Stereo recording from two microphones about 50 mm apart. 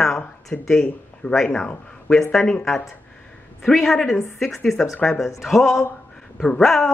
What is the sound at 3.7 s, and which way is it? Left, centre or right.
Speech, centre.